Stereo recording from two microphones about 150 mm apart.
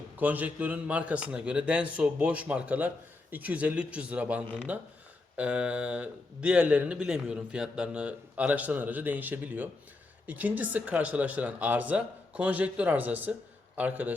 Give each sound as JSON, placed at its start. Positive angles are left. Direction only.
{"t": 0.2, "sound": "speech", "side_deg": -10}